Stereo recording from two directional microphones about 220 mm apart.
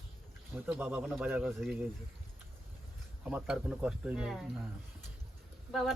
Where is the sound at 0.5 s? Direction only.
10° right (ahead or behind).